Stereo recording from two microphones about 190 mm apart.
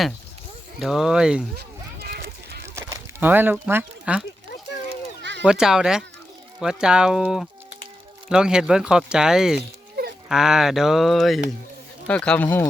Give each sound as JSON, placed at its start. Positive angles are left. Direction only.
{"t": 0.8, "sound": "speech", "side_deg": 0}
{"t": 1.5, "sound": "a sound", "side_deg": -55}
{"t": 2.7, "sound": "speech", "side_deg": -10}
{"t": 5.5, "sound": "speech", "side_deg": -5}
{"t": 9.9, "sound": "a sound", "side_deg": -55}
{"t": 10.2, "sound": "speech", "side_deg": -5}